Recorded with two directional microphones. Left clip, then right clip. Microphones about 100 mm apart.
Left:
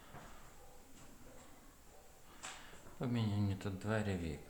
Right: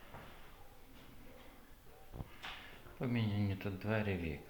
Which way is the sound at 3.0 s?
15° left (ahead or behind).